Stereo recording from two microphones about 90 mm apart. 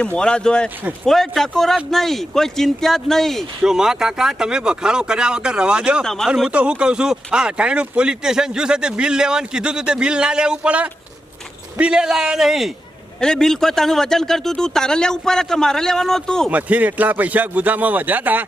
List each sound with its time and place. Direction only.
0.0 s speech: 10° left (ahead or behind); by 6.1 s 10° right (ahead or behind)
6.1 s speech: centre (ahead or behind)
16.5 s speech: 15° right (ahead or behind)